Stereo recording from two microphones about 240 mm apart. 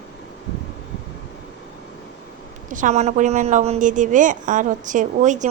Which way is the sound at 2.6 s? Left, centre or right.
Right.